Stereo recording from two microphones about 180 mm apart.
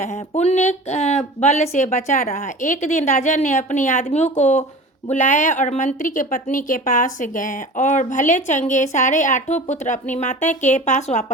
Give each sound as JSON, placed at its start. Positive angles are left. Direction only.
{"t": 0.0, "sound": "speech", "side_deg": 40}